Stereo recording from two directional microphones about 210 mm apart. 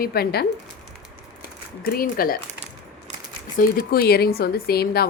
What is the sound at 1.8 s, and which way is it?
Speech, 45° left (ahead or behind).